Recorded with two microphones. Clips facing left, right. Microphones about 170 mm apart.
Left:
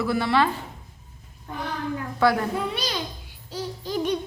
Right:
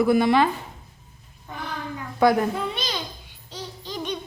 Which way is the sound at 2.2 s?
20° right (ahead or behind).